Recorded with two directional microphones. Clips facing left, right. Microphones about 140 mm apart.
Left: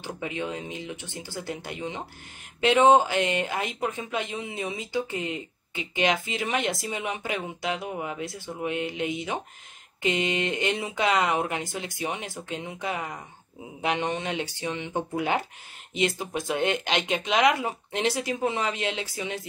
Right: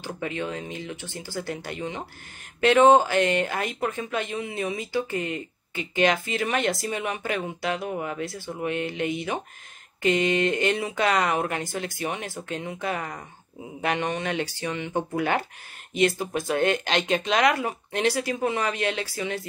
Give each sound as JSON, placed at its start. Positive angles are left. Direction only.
{"t": 0.0, "sound": "speech", "side_deg": 15}